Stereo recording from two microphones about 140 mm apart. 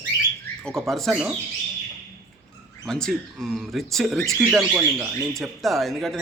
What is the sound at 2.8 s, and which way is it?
A man's voice, 5° left (ahead or behind).